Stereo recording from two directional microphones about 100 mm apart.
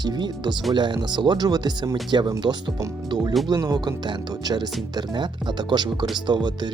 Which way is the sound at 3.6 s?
45° right (ahead or behind).